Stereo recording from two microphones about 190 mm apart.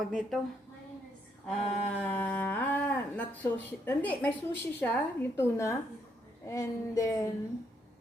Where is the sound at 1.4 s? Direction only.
5° left (ahead or behind).